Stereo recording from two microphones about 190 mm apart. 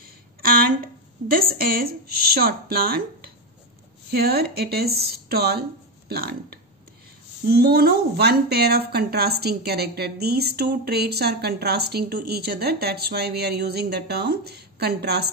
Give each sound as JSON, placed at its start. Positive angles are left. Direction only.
{"t": 0.4, "sound": "a sound", "side_deg": -50}
{"t": 1.3, "sound": "speech", "side_deg": -50}
{"t": 4.1, "sound": "a woman's voice", "side_deg": -55}